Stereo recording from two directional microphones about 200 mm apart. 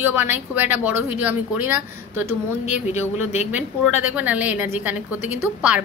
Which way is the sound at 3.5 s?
10° right (ahead or behind).